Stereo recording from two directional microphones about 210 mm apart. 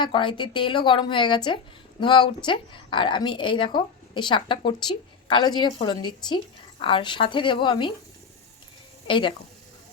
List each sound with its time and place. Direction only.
0.0 s a woman's voice: 25° left (ahead or behind)
9.0 s speech: 25° left (ahead or behind)